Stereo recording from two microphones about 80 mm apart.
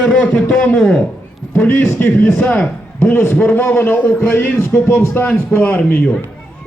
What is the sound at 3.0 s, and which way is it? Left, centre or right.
A man's voice, left.